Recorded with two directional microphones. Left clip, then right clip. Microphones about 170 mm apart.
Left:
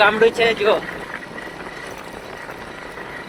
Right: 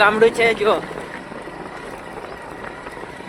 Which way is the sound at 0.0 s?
20° right (ahead or behind).